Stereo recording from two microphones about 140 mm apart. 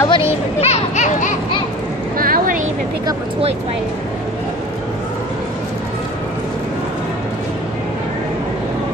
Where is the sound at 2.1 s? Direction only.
90° right.